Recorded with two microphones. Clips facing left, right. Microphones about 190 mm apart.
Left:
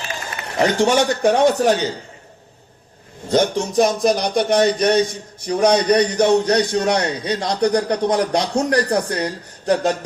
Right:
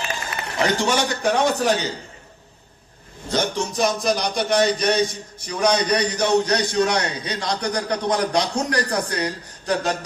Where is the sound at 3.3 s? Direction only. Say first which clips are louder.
Left 7 dB; 50° left (ahead or behind).